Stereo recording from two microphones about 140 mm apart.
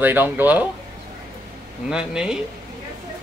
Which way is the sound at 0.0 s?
15° right (ahead or behind).